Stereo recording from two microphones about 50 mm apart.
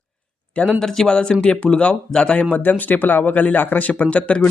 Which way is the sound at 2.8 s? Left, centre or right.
Left.